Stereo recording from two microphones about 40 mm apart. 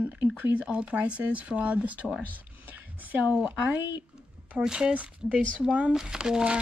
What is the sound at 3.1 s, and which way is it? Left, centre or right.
Speech, right.